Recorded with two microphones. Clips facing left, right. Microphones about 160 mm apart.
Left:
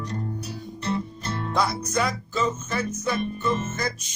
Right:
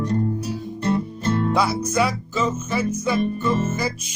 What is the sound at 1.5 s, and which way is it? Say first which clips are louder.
Music: right 4 dB; 5° right (ahead or behind).